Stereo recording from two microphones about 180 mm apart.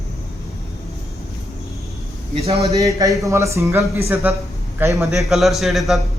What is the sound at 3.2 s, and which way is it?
Speech, 15° right (ahead or behind).